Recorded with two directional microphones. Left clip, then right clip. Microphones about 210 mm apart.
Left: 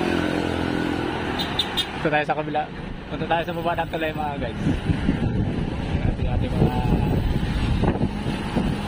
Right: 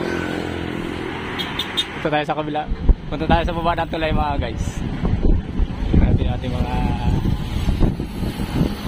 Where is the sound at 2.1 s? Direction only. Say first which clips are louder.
Even; 15° right (ahead or behind).